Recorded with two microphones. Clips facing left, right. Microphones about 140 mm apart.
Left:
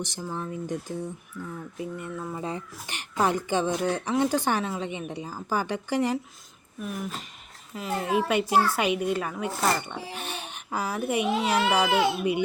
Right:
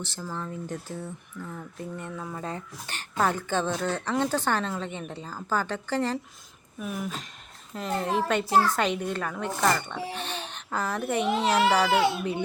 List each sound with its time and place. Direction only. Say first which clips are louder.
0.0 s a woman's voice: left 2 dB; 15° left (ahead or behind)
6.7 s a woman's voice: right 1 dB; centre (ahead or behind)
9.6 s speech: right 1 dB; 25° left (ahead or behind)
10.2 s a child's voice: right 1 dB; 10° left (ahead or behind)